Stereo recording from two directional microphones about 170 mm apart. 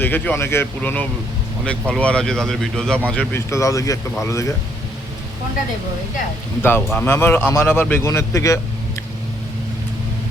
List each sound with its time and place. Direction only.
0.0 s a man's voice: 10° left (ahead or behind)
6.6 s a man's voice: 10° left (ahead or behind)